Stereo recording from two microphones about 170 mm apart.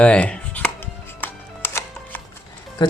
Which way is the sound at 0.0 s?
5° left (ahead or behind).